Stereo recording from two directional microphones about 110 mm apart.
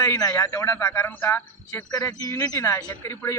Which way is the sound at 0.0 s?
30° left (ahead or behind).